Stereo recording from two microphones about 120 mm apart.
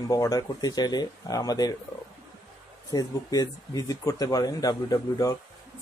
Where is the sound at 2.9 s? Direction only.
30° left (ahead or behind).